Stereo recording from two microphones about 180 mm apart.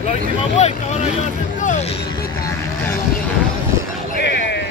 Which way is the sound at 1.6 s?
45° left (ahead or behind).